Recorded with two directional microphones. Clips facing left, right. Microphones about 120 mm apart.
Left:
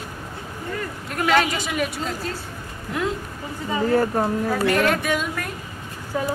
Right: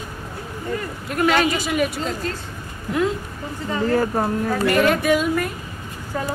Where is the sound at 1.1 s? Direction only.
5° right (ahead or behind).